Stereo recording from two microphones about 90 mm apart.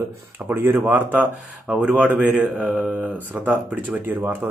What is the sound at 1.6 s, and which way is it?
Speech, 5° right (ahead or behind).